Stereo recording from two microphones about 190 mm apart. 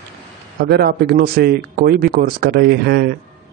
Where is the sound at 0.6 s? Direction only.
60° right (ahead or behind).